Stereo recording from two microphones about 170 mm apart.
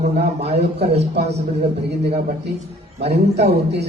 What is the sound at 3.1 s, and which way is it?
Speech, 75° right (ahead or behind).